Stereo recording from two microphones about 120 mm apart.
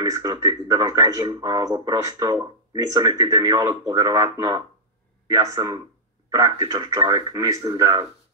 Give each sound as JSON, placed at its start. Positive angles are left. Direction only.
{"t": 0.0, "sound": "speech", "side_deg": -30}